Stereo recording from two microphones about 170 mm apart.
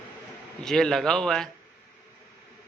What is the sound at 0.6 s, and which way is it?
Speech, 5° left (ahead or behind).